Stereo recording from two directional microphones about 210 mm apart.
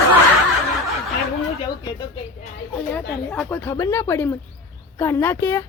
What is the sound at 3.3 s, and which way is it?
Speech, 5° left (ahead or behind).